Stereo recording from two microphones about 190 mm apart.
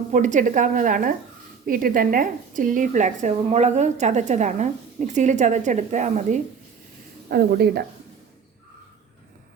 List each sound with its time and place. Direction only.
0.1 s a woman's voice: 40° right (ahead or behind)
7.3 s speech: 55° right (ahead or behind)